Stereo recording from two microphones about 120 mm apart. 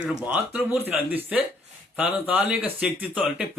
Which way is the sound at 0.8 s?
15° right (ahead or behind).